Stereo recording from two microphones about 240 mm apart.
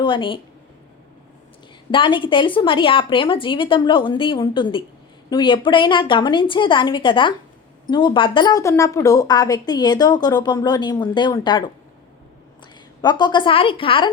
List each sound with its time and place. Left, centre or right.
0.0 s speech: centre
1.9 s a woman's voice: left
13.0 s speech: centre